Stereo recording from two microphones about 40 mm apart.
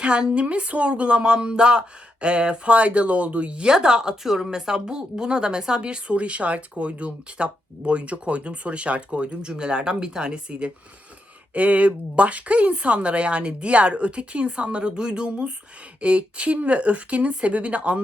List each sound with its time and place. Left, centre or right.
0.0 s speech: right
3.7 s a woman's voice: centre